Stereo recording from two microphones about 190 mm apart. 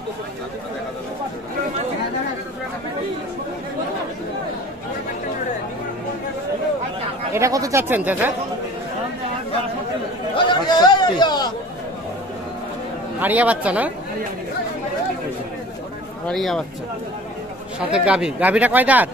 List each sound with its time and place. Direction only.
7.3 s speech: 15° right (ahead or behind)
10.3 s chatter: 25° left (ahead or behind)
13.2 s speech: 10° right (ahead or behind)
16.3 s speech: centre (ahead or behind)
17.7 s speech: 5° right (ahead or behind)